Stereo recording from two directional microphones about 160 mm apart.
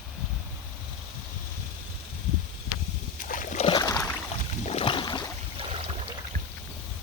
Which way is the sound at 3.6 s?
25° left (ahead or behind).